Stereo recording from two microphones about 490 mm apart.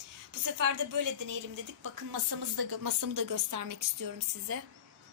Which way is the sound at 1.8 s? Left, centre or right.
Right.